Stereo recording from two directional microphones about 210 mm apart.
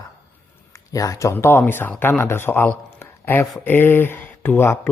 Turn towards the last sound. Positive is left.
turn(degrees=10)  # may be behind; listen again after turning